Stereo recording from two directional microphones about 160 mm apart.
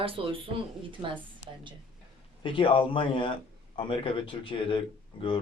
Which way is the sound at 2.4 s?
30° left (ahead or behind).